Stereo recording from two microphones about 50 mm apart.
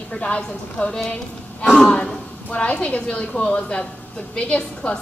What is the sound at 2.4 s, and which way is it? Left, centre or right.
A woman's voice, left.